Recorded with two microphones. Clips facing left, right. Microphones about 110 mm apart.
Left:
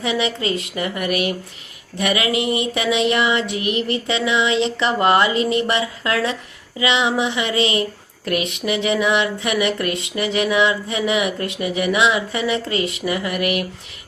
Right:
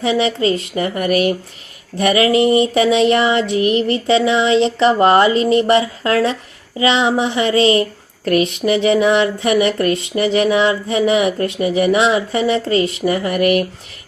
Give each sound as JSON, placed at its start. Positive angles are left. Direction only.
{"t": 0.0, "sound": "speech", "side_deg": -35}